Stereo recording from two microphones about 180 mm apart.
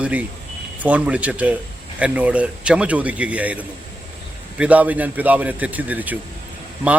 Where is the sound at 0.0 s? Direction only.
10° right (ahead or behind).